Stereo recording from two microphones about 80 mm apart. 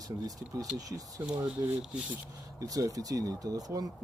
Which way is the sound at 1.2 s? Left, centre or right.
Right.